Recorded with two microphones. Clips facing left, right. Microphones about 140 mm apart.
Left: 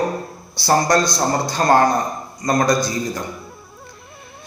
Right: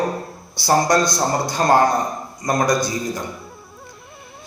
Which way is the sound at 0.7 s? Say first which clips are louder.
Even; 15° right (ahead or behind).